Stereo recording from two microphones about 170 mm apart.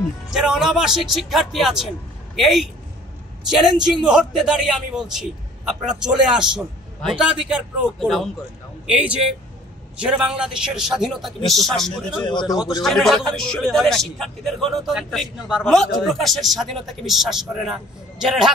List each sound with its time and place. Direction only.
0.3 s a man's voice: centre (ahead or behind)
3.9 s a man's voice: 5° right (ahead or behind)
12.3 s a man's voice: 25° left (ahead or behind)
12.8 s a man's voice: centre (ahead or behind)